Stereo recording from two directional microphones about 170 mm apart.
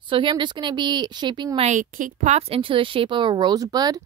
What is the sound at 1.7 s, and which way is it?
A woman's voice, 50° right (ahead or behind).